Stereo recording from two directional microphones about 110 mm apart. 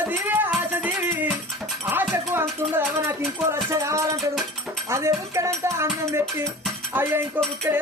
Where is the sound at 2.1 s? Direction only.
20° right (ahead or behind).